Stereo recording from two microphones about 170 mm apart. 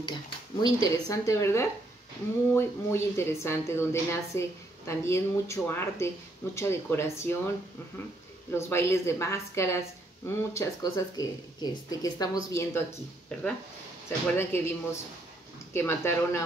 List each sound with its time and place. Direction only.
0.0 s a woman's voice: 25° left (ahead or behind)
13.3 s a woman's voice: 5° left (ahead or behind)